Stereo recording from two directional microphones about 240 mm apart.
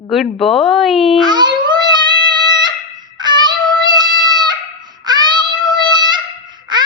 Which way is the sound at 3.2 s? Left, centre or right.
Centre.